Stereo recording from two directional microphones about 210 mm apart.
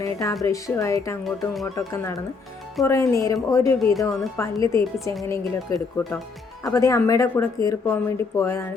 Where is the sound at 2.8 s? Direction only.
15° left (ahead or behind).